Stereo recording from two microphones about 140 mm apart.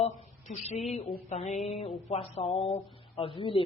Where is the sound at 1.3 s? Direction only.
55° left (ahead or behind).